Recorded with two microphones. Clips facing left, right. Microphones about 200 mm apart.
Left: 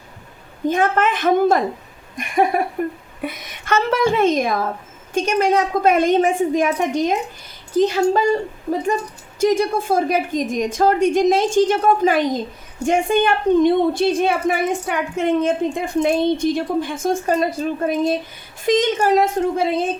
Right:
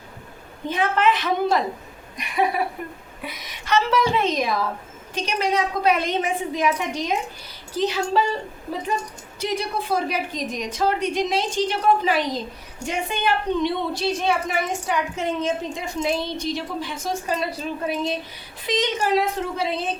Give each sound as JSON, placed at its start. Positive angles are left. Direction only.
{"t": 0.7, "sound": "a woman's voice", "side_deg": 45}